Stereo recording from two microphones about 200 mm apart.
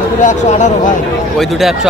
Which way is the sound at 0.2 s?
35° left (ahead or behind).